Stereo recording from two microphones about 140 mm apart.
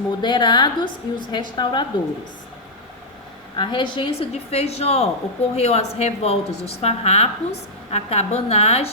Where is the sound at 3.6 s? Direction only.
35° left (ahead or behind).